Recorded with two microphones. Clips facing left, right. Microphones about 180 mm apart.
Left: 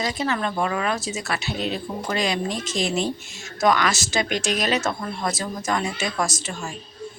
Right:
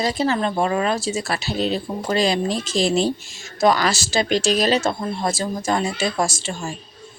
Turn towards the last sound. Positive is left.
turn(degrees=-30)  # may be behind; listen again after turning